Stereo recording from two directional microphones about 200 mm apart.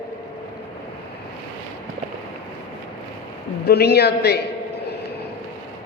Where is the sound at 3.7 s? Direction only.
55° left (ahead or behind).